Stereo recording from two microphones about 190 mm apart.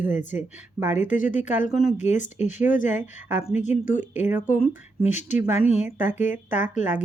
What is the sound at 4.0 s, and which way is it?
Speech, 10° right (ahead or behind).